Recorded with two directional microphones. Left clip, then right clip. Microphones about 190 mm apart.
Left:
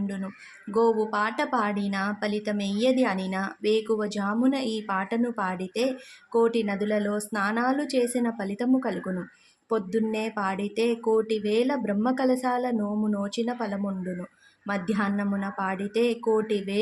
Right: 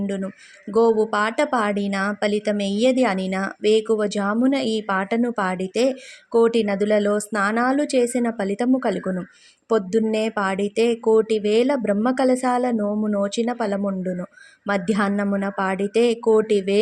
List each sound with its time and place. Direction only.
0.7 s a woman's voice: 25° right (ahead or behind)